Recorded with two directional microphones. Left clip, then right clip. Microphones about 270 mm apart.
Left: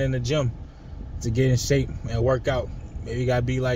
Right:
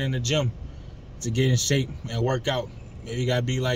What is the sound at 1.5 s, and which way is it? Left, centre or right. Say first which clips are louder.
Speech: left 1 dB; centre.